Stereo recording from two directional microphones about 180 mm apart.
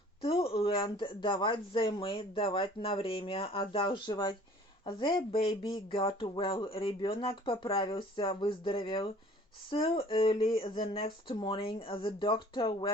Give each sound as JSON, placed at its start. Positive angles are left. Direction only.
{"t": 0.4, "sound": "speech", "side_deg": 30}